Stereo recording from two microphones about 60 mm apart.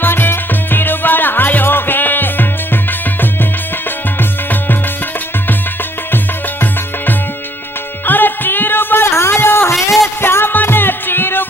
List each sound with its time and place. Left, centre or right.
0.0 s music: left
8.0 s music: left